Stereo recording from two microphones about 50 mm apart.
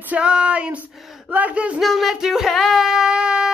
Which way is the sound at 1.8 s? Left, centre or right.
Centre.